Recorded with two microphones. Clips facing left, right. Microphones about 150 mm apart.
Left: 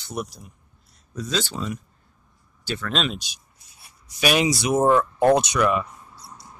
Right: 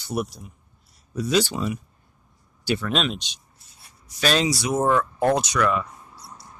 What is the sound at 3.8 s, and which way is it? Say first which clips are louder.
Speech: left 1 dB; 15° left (ahead or behind).